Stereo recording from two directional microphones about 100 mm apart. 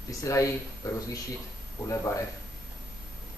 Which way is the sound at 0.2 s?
35° left (ahead or behind).